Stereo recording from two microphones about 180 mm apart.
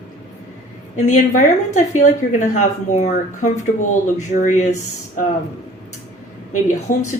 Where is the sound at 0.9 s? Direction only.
40° left (ahead or behind).